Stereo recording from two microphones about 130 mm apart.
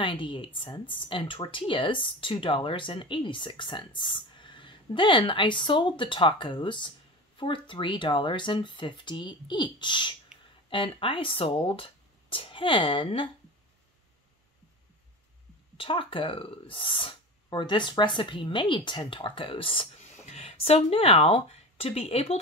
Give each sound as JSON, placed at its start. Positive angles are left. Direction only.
{"t": 0.0, "sound": "speech", "side_deg": 40}
{"t": 15.8, "sound": "speech", "side_deg": 40}
{"t": 20.0, "sound": "speech", "side_deg": 55}